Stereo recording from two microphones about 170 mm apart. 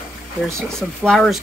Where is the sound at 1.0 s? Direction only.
5° left (ahead or behind).